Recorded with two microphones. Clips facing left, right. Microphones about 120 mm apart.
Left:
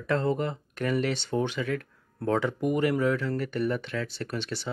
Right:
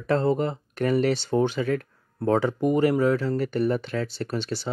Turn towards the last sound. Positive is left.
turn(degrees=-35)  # may be behind; listen again after turning